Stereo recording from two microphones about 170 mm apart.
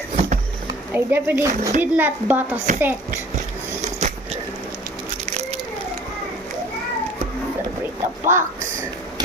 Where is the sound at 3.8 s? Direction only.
40° right (ahead or behind).